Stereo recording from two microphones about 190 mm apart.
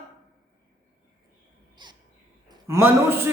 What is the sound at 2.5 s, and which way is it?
Speech, 15° right (ahead or behind).